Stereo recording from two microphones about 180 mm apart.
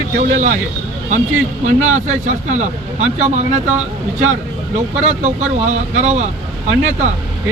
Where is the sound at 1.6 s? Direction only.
45° right (ahead or behind).